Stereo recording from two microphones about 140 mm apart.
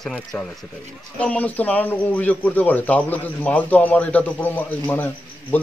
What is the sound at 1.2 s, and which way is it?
Speech, 10° left (ahead or behind).